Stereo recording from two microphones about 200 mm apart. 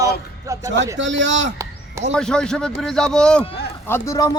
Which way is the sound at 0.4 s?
15° right (ahead or behind).